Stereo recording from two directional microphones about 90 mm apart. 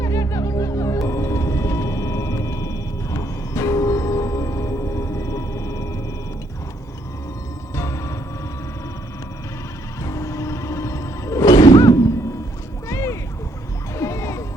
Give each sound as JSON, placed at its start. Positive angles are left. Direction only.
{"t": 0.0, "sound": "music", "side_deg": 35}
{"t": 7.8, "sound": "music", "side_deg": 35}
{"t": 10.0, "sound": "music", "side_deg": 35}
{"t": 11.8, "sound": "a sound", "side_deg": 35}
{"t": 12.9, "sound": "music", "side_deg": 35}